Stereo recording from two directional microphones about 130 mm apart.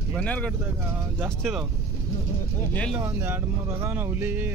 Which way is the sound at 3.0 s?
15° right (ahead or behind).